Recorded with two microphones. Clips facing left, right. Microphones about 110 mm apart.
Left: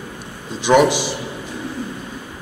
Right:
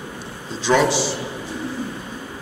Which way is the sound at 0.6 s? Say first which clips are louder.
Left 4 dB; 15° left (ahead or behind).